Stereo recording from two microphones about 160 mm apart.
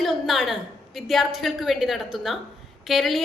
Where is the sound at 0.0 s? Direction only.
Centre (ahead or behind).